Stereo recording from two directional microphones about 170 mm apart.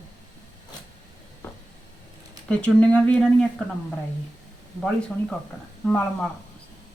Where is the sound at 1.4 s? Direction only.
15° left (ahead or behind).